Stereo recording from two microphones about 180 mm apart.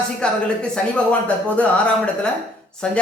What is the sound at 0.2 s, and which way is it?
Speech, 5° left (ahead or behind).